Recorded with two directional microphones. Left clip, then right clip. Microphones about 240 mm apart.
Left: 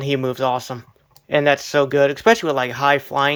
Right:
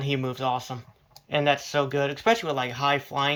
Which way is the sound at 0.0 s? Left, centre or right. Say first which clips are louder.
Left 8 dB; left.